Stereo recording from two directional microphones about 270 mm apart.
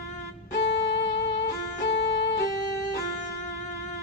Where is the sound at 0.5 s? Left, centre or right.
Left.